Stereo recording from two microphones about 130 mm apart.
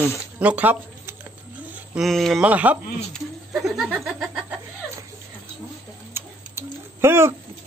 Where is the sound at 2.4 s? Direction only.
10° right (ahead or behind).